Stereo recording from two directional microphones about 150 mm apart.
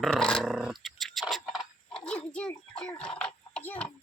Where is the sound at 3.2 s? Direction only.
5° left (ahead or behind).